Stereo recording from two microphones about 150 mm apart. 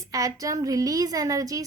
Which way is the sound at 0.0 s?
25° right (ahead or behind).